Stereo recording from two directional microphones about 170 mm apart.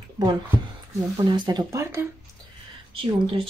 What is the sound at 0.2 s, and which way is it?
Speech, 25° right (ahead or behind).